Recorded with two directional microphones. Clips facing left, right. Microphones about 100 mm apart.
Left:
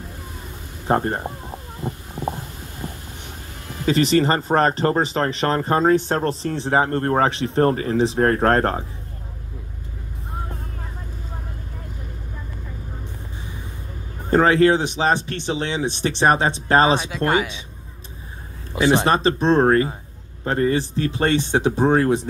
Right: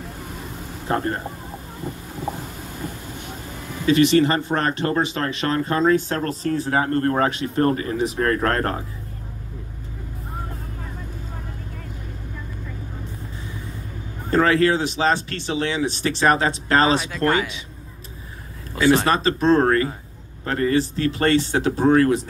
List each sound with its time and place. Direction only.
0.8 s speech: 30° left (ahead or behind)
1.8 s a sound: 15° left (ahead or behind)
3.9 s speech: 35° left (ahead or behind)
14.3 s speech: 20° left (ahead or behind)
18.8 s speech: 20° left (ahead or behind)